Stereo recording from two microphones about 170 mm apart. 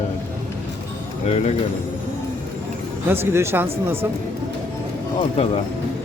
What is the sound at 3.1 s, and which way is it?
Speech, 15° right (ahead or behind).